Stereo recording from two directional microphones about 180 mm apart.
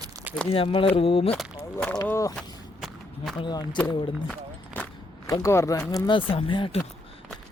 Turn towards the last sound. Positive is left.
turn(degrees=30)  # may be behind; listen again after turning